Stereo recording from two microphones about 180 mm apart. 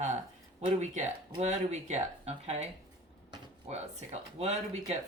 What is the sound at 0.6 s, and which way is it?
Speech, 40° right (ahead or behind).